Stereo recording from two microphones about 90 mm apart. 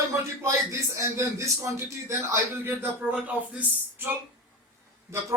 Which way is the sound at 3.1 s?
15° right (ahead or behind).